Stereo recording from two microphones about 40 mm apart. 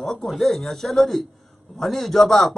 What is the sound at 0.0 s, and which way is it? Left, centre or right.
Speech, centre.